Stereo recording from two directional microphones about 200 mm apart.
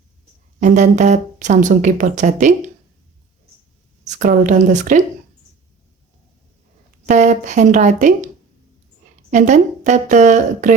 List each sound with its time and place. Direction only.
0.6 s speech: 35° right (ahead or behind)
4.0 s speech: 40° right (ahead or behind)
7.0 s speech: 35° right (ahead or behind)
9.3 s speech: 35° right (ahead or behind)